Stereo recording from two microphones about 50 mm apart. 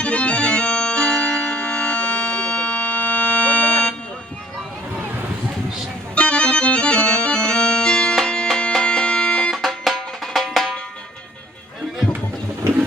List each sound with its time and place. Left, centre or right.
0.0 s music: left
6.1 s music: left
9.5 s music: centre